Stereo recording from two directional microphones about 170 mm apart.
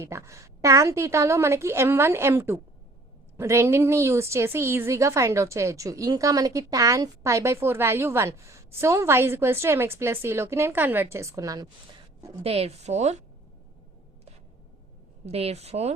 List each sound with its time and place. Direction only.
0.0 s a woman's voice: 15° right (ahead or behind)
12.4 s a woman's voice: 35° right (ahead or behind)
15.3 s a woman's voice: 40° right (ahead or behind)